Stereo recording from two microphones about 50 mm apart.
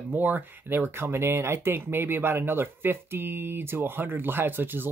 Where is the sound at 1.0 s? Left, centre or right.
Right.